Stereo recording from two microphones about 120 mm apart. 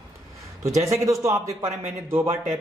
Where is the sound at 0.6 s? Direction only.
25° right (ahead or behind).